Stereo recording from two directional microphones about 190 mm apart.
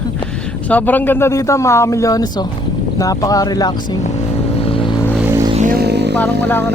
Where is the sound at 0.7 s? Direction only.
10° left (ahead or behind).